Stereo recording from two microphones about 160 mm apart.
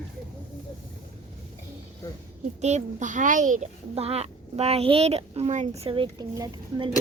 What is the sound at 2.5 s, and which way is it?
A child's voice, 45° right (ahead or behind).